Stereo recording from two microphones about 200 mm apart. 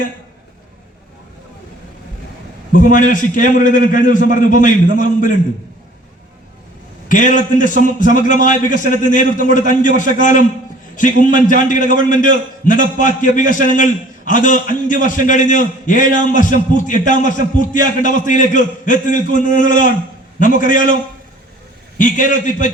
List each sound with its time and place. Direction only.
2.7 s a man's voice: 40° left (ahead or behind)
7.1 s a man's voice: 40° left (ahead or behind)
21.9 s a man's voice: 40° left (ahead or behind)